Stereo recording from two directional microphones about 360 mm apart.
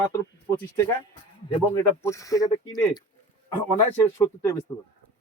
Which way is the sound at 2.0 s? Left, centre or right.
Centre.